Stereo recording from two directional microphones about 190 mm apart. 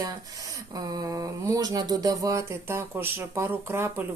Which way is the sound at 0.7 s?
20° right (ahead or behind).